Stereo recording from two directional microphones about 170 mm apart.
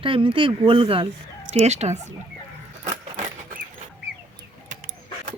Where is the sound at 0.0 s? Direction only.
30° right (ahead or behind).